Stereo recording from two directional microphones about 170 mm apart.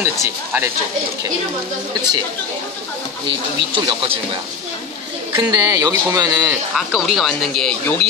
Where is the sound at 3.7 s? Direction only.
30° right (ahead or behind).